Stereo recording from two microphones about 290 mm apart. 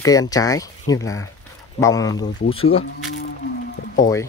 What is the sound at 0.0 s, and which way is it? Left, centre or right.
Speech, centre.